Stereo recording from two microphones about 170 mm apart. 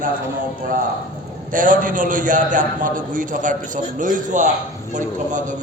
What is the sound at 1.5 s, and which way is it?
A man's voice, 55° right (ahead or behind).